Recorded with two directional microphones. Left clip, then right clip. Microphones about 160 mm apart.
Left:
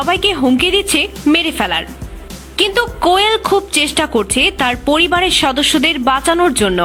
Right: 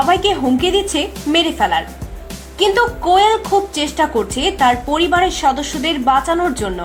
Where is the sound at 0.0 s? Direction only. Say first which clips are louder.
Even; 20° left (ahead or behind).